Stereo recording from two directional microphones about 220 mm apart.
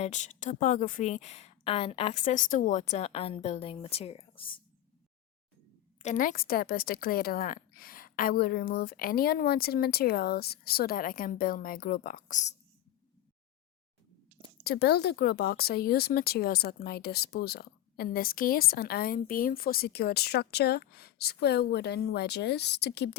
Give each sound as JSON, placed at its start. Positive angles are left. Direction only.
{"t": 0.0, "sound": "a woman's voice", "side_deg": 35}
{"t": 6.0, "sound": "a woman's voice", "side_deg": 35}
{"t": 14.6, "sound": "speech", "side_deg": 45}